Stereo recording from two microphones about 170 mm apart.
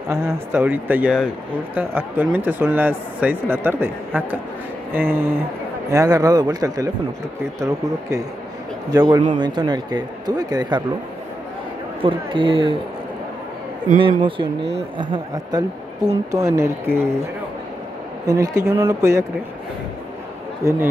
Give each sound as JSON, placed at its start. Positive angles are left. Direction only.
{"t": 0.1, "sound": "speech", "side_deg": -10}
{"t": 8.9, "sound": "speech", "side_deg": -25}
{"t": 12.0, "sound": "speech", "side_deg": -30}
{"t": 13.9, "sound": "speech", "side_deg": -30}
{"t": 18.2, "sound": "speech", "side_deg": -20}
{"t": 20.6, "sound": "speech", "side_deg": -15}